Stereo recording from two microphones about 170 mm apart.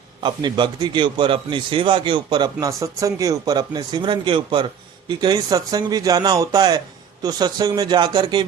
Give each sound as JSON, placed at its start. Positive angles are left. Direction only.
{"t": 0.2, "sound": "a man's voice", "side_deg": -25}